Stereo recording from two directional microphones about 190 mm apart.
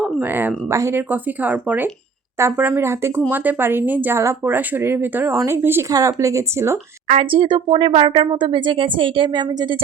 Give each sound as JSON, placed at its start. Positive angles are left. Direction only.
{"t": 0.2, "sound": "speech", "side_deg": -10}
{"t": 7.1, "sound": "speech", "side_deg": -30}